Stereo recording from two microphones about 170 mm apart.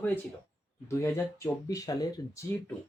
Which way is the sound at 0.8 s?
15° left (ahead or behind).